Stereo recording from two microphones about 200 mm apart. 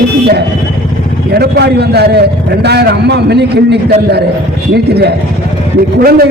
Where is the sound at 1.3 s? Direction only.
55° right (ahead or behind).